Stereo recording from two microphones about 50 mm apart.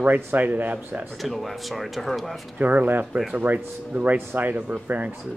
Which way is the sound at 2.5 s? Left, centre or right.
Right.